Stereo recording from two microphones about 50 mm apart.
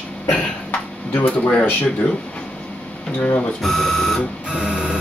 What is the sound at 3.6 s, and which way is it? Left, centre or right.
Speech, centre.